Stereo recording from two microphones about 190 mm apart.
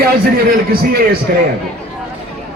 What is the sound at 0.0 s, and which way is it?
A man's voice, 55° right (ahead or behind).